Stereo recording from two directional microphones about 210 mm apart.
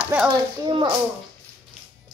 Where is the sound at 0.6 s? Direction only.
20° right (ahead or behind).